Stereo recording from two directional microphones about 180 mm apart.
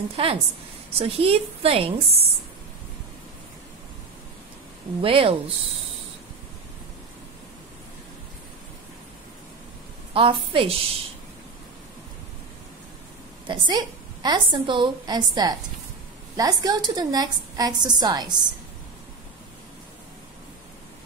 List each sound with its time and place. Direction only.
0.1 s a woman's voice: 30° right (ahead or behind)
5.0 s a woman's voice: 30° right (ahead or behind)
10.1 s a woman's voice: 30° right (ahead or behind)
13.5 s a woman's voice: 25° right (ahead or behind)